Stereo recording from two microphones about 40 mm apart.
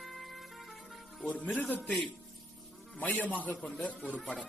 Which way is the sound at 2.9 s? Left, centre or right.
Left.